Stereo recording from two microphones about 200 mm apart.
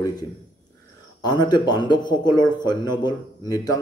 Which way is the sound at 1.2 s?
20° left (ahead or behind).